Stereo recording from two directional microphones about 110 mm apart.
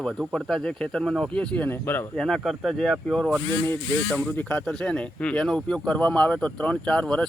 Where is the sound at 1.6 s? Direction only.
20° left (ahead or behind).